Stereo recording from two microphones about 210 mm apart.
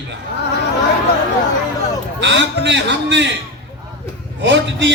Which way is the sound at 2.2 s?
60° right (ahead or behind).